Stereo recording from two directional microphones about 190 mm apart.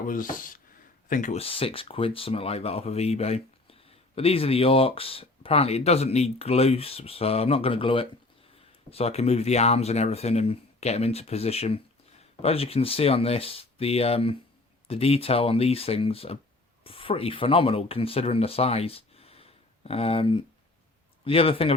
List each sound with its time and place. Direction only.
0.0 s speech: 45° left (ahead or behind); by 21.8 s 30° left (ahead or behind)